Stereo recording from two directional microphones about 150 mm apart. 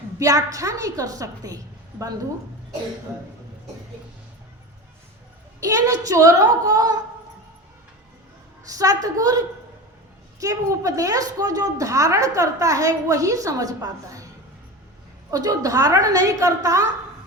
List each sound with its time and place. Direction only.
0.2 s a woman's voice: 25° right (ahead or behind)
5.5 s a woman's voice: 20° right (ahead or behind)
8.6 s a woman's voice: 25° right (ahead or behind)
10.4 s a woman's voice: 20° right (ahead or behind)
15.3 s a woman's voice: 25° right (ahead or behind)